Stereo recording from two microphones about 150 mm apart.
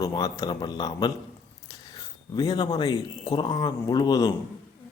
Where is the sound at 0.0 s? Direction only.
25° left (ahead or behind).